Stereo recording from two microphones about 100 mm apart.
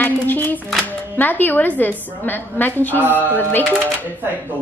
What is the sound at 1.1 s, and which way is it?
A woman's voice, 20° left (ahead or behind).